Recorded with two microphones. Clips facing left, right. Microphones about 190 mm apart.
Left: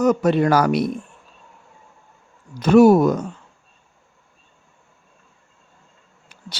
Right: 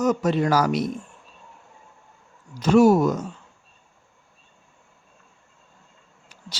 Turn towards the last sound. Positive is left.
turn(degrees=60)  # may be behind; listen again after turning